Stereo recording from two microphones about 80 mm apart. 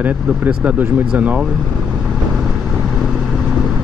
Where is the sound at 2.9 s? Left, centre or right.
Centre.